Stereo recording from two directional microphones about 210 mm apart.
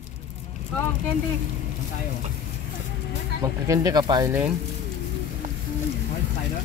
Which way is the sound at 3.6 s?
15° right (ahead or behind).